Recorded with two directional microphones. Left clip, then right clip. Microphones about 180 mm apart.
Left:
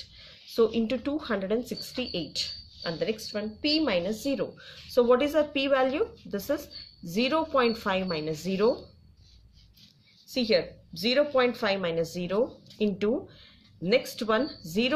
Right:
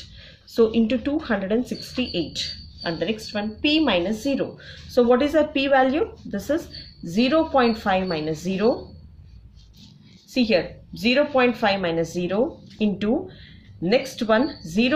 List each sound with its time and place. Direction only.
0.2 s a woman's voice: 25° left (ahead or behind)
10.3 s a woman's voice: 30° left (ahead or behind)